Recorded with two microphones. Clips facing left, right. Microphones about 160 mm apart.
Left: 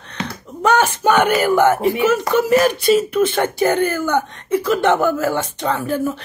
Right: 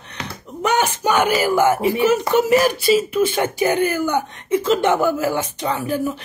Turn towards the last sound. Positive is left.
turn(degrees=-15)  # may be behind; listen again after turning